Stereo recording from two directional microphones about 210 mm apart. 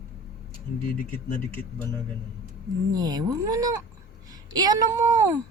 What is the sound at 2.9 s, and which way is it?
Speech, 20° right (ahead or behind).